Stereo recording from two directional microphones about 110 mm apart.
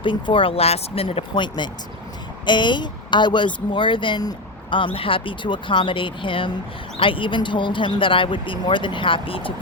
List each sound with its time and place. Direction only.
0.0 s speech: 50° left (ahead or behind)
4.9 s speech: 55° left (ahead or behind)